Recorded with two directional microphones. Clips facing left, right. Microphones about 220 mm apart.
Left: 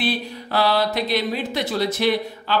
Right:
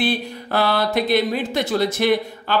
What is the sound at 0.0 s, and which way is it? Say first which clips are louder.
A man's voice: right 2 dB; 50° right (ahead or behind).